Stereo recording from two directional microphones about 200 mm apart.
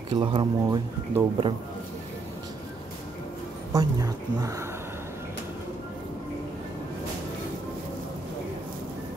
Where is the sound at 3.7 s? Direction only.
15° right (ahead or behind).